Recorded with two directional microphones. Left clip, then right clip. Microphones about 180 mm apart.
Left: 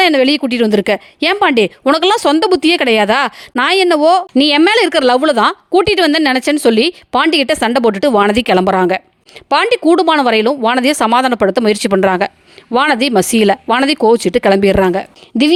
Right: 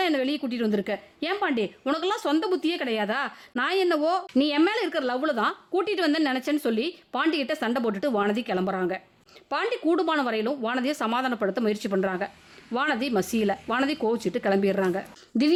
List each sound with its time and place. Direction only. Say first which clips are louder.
0.0 s speech: left 15 dB; 50° left (ahead or behind)